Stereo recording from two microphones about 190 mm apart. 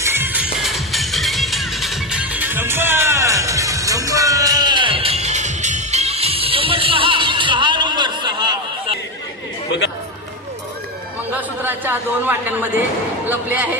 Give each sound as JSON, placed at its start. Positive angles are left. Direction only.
{"t": 0.0, "sound": "music", "side_deg": -10}
{"t": 11.3, "sound": "a man's voice", "side_deg": -10}